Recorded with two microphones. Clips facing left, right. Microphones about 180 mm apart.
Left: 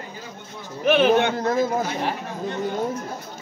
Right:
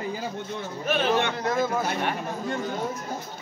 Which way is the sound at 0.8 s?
65° left (ahead or behind).